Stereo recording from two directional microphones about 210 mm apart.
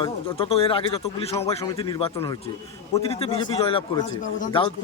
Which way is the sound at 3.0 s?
30° left (ahead or behind).